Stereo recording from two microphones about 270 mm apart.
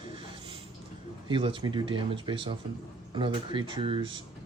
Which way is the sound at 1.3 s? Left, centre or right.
Centre.